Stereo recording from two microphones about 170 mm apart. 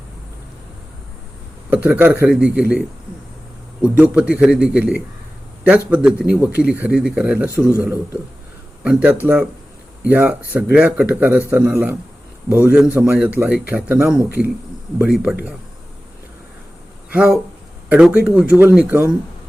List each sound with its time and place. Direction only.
1.7 s a man's voice: 10° right (ahead or behind)
8.8 s a man's voice: 5° right (ahead or behind)
17.1 s speech: 10° right (ahead or behind)